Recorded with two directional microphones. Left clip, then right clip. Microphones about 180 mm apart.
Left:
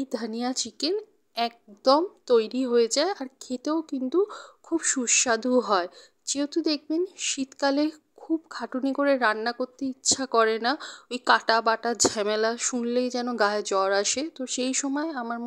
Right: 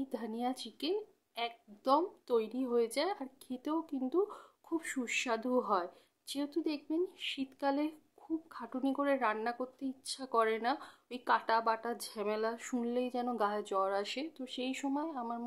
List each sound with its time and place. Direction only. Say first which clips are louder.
0.0 s a woman's voice: left 8 dB; 35° left (ahead or behind)